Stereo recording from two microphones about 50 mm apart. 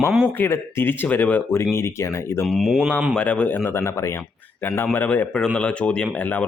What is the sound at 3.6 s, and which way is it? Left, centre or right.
Speech, left.